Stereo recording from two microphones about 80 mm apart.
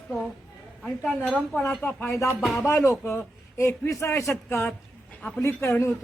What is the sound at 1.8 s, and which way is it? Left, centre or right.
Speech, left.